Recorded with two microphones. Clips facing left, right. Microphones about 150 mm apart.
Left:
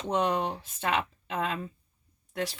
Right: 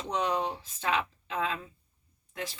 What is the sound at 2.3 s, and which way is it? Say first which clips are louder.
Speech: left 6 dB; 70° left (ahead or behind).